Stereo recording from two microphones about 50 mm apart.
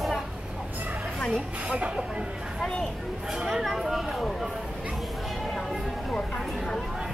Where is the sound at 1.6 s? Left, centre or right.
Right.